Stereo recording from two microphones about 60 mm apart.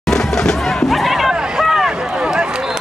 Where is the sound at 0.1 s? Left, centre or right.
Centre.